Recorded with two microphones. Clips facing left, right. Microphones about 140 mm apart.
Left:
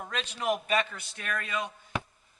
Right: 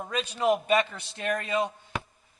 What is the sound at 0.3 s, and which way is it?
A man's voice, 30° right (ahead or behind).